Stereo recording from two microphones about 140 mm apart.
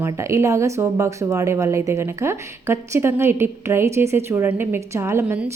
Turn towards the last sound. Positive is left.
turn(degrees=-20)  # may be behind; listen again after turning